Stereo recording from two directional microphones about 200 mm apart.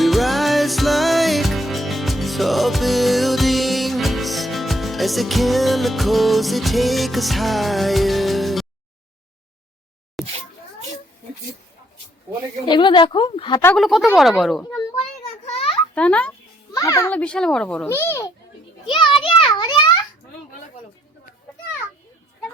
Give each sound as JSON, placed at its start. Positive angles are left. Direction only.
{"t": 0.0, "sound": "music", "side_deg": 0}
{"t": 10.2, "sound": "a sound", "side_deg": 0}
{"t": 12.6, "sound": "a woman's voice", "side_deg": 20}
{"t": 13.7, "sound": "a child's voice", "side_deg": 0}
{"t": 15.4, "sound": "a sound", "side_deg": 30}
{"t": 16.0, "sound": "a child's voice", "side_deg": 5}
{"t": 16.7, "sound": "a child's voice", "side_deg": 15}
{"t": 18.9, "sound": "a child's voice", "side_deg": 25}